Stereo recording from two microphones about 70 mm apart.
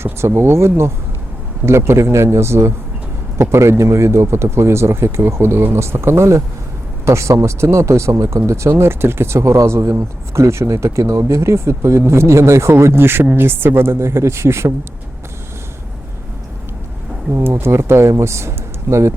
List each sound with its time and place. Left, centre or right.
0.0 s speech: right
17.3 s speech: right